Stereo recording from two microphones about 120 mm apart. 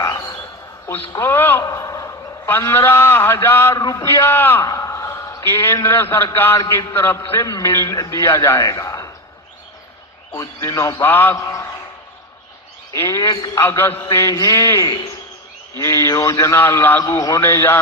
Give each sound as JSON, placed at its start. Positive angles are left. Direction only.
{"t": 0.0, "sound": "a sound", "side_deg": 25}
{"t": 1.1, "sound": "a man's voice", "side_deg": 20}
{"t": 3.8, "sound": "a man's voice", "side_deg": 30}
{"t": 4.0, "sound": "a man's voice", "side_deg": 20}
{"t": 4.6, "sound": "a sound", "side_deg": 30}
{"t": 6.3, "sound": "a man's voice", "side_deg": 20}
{"t": 10.3, "sound": "a man's voice", "side_deg": 25}
{"t": 12.9, "sound": "a man's voice", "side_deg": 25}